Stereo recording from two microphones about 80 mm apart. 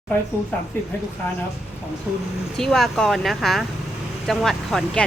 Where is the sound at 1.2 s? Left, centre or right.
Left.